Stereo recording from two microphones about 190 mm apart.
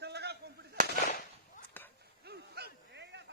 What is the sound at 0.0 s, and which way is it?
Artillery fire, 60° right (ahead or behind).